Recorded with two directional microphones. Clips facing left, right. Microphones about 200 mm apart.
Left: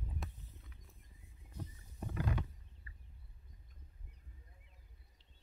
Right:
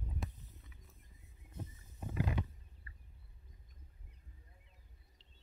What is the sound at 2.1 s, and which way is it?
Wild animals, 10° right (ahead or behind).